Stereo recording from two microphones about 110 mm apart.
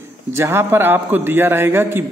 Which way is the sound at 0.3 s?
25° right (ahead or behind).